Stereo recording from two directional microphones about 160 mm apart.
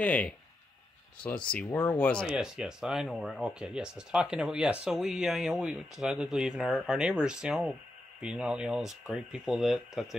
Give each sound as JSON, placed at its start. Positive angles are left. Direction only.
{"t": 0.0, "sound": "speech", "side_deg": 10}
{"t": 1.5, "sound": "speech", "side_deg": 5}
{"t": 2.2, "sound": "speech", "side_deg": -5}